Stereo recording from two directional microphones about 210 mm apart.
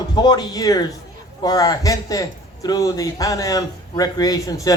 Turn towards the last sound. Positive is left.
turn(degrees=15)  # may be behind; listen again after turning